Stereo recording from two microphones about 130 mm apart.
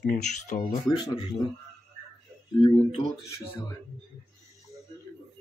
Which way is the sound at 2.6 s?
40° left (ahead or behind).